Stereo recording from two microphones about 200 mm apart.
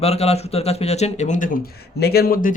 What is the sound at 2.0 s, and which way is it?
Speech, 50° left (ahead or behind).